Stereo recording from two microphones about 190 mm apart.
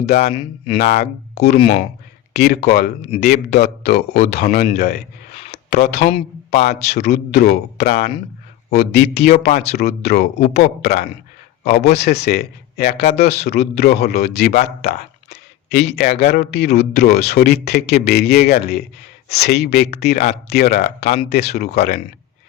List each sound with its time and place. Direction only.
0.1 s speech: 30° left (ahead or behind)
1.0 s speech: 60° left (ahead or behind)
1.5 s speech: 30° left (ahead or behind)
2.3 s speech: 60° left (ahead or behind)
5.3 s a sound: 30° left (ahead or behind)
5.7 s speech: 60° left (ahead or behind)
6.0 s speech: 30° left (ahead or behind)
6.5 s speech: 60° left (ahead or behind)
14.8 s a sound: 60° left (ahead or behind)
16.2 s speech: 60° left (ahead or behind)
21.0 s speech: 30° left (ahead or behind)
21.3 s speech: 55° left (ahead or behind)